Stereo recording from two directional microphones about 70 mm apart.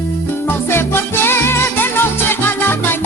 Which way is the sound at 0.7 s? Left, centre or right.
Left.